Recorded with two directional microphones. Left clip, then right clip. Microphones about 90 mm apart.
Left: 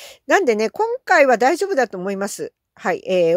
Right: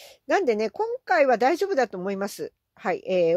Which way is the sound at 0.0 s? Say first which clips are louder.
Left 7 dB; 35° left (ahead or behind).